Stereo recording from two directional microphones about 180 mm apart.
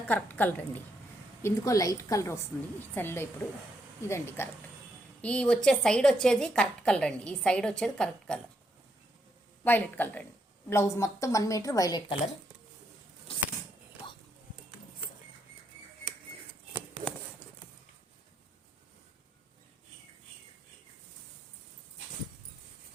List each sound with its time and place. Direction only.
0.1 s a woman's voice: 10° left (ahead or behind)
9.6 s speech: 10° left (ahead or behind); by 12.3 s 25° left (ahead or behind)